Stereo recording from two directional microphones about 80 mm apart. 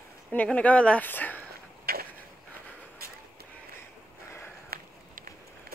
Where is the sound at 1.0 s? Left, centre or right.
Left.